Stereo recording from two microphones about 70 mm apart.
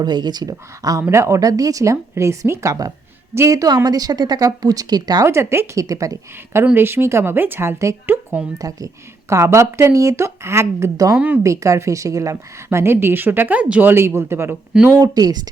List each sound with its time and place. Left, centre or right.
0.0 s speech: right
0.8 s a woman's voice: right
1.1 s speech: right
1.4 s speech: right
3.8 s speech: right
5.2 s a woman's voice: right
5.8 s a woman's voice: right
6.7 s a woman's voice: right
8.5 s a woman's voice: right
9.3 s speech: right
10.9 s a woman's voice: right
13.9 s a woman's voice: right
14.8 s speech: right